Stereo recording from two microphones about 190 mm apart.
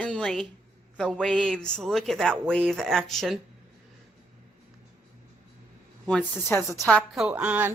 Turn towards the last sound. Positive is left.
turn(degrees=-10)  # may be behind; listen again after turning